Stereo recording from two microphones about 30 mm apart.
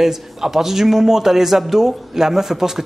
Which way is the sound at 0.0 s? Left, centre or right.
Centre.